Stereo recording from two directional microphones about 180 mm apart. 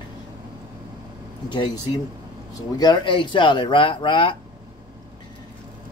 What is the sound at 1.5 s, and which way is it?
Speech, 25° left (ahead or behind).